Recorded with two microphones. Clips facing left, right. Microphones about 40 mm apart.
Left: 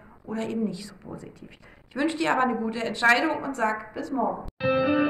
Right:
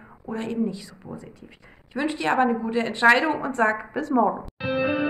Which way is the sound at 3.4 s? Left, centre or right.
Right.